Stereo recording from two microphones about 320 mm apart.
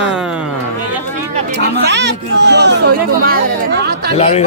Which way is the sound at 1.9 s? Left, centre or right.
Right.